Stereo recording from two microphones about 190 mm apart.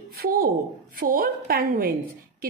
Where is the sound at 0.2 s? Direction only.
50° right (ahead or behind).